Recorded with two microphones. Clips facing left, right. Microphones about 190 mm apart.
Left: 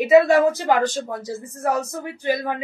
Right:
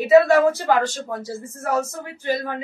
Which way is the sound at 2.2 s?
15° left (ahead or behind).